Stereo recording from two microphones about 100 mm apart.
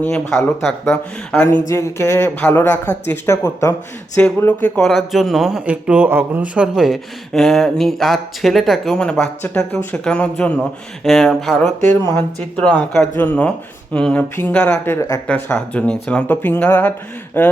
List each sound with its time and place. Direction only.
0.1 s speech: 5° left (ahead or behind)
1.5 s speech: 30° left (ahead or behind)
4.2 s speech: 15° left (ahead or behind)
4.8 s a man's voice: centre (ahead or behind)
13.1 s speech: 15° left (ahead or behind)